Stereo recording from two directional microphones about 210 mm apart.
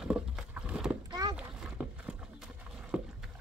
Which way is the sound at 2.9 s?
5° right (ahead or behind).